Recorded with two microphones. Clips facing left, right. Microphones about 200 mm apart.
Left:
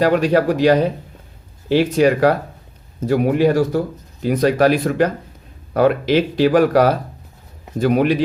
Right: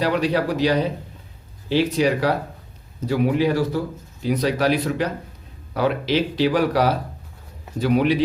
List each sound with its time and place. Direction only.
0.0 s speech: 50° left (ahead or behind)